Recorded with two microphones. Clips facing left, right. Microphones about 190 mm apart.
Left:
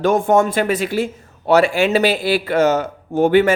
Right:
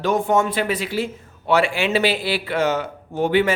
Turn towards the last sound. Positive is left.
turn(degrees=45)  # may be behind; listen again after turning